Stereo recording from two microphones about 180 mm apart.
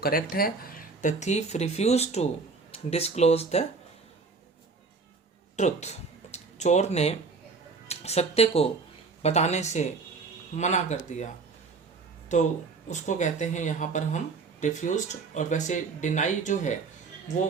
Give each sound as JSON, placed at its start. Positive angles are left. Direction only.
{"t": 0.0, "sound": "speech", "side_deg": 55}
{"t": 5.5, "sound": "speech", "side_deg": 40}
{"t": 12.3, "sound": "speech", "side_deg": 40}